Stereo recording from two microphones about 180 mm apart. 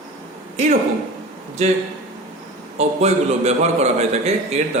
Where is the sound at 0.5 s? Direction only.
40° right (ahead or behind).